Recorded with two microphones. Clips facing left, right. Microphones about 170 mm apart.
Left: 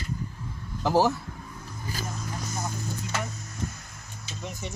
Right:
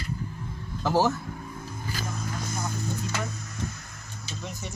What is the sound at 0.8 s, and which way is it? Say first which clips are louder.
Speech: left 1 dB; 15° left (ahead or behind).